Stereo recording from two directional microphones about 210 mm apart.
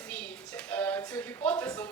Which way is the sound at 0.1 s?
5° left (ahead or behind).